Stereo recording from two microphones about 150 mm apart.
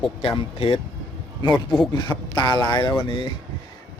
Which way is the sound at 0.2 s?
40° left (ahead or behind).